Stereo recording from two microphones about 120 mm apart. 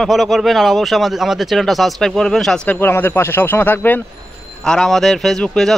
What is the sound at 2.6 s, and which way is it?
Speech, 15° left (ahead or behind).